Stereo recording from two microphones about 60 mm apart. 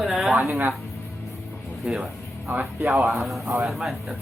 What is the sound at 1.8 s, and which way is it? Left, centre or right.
Speech, centre.